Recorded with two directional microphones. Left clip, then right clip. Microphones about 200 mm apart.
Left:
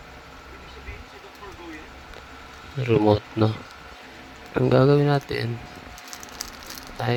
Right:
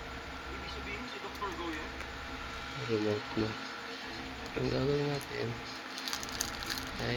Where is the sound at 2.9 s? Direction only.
50° left (ahead or behind).